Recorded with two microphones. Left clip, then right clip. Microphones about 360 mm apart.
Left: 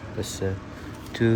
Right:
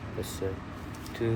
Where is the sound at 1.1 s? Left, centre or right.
Left.